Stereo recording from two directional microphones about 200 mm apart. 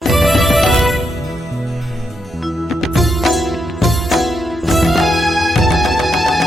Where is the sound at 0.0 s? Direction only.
Centre (ahead or behind).